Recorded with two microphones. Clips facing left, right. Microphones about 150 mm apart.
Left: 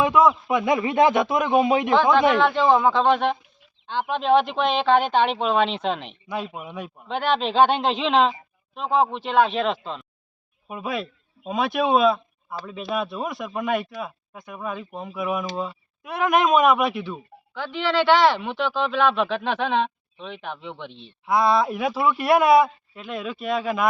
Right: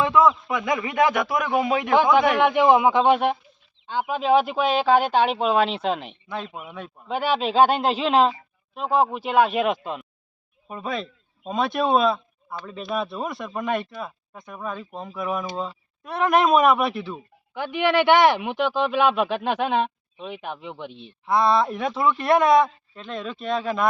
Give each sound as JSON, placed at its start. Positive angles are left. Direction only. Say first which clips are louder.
{"t": 0.0, "sound": "a man's voice", "louder": "left 1 dB", "side_deg": 20}
{"t": 2.0, "sound": "speech", "louder": "right 1 dB", "side_deg": -15}
{"t": 6.2, "sound": "speech", "louder": "left 2 dB", "side_deg": 15}
{"t": 7.1, "sound": "speech", "louder": "even", "side_deg": -5}
{"t": 10.7, "sound": "a man's voice", "louder": "left 1 dB", "side_deg": 5}
{"t": 17.5, "sound": "speech", "louder": "right 3 dB", "side_deg": -15}
{"t": 21.2, "sound": "speech", "louder": "even", "side_deg": 0}